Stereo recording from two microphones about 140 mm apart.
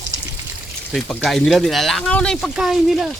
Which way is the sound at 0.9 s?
Centre (ahead or behind).